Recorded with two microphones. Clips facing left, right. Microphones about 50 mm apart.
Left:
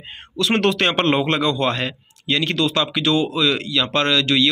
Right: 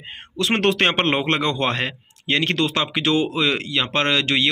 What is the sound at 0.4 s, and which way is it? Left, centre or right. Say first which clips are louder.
Speech: left 1 dB; right.